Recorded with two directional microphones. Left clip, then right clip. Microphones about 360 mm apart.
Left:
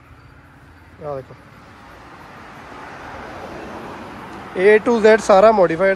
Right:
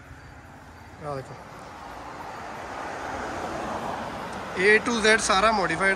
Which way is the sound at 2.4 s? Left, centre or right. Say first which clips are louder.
Right 1 dB; centre.